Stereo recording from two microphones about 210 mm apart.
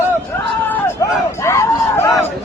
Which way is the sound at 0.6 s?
10° left (ahead or behind).